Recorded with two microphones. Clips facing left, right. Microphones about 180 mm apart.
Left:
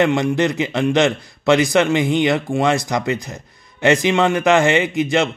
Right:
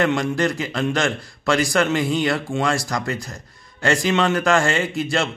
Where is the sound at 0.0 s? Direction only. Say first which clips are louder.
Left 3 dB; 20° left (ahead or behind).